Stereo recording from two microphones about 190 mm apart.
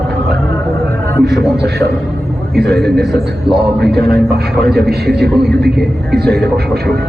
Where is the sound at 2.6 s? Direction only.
60° right (ahead or behind).